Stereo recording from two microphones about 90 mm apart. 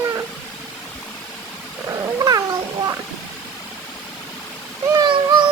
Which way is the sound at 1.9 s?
45° right (ahead or behind).